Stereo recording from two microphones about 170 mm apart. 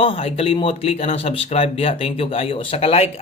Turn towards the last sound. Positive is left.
turn(degrees=35)  # may be behind; listen again after turning